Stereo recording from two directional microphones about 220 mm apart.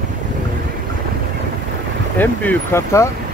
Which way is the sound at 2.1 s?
10° left (ahead or behind).